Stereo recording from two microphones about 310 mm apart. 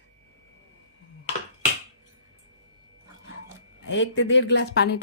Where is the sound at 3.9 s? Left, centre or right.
Left.